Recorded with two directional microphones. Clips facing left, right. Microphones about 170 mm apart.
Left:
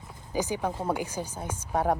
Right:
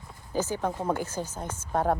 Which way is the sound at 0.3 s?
15° left (ahead or behind).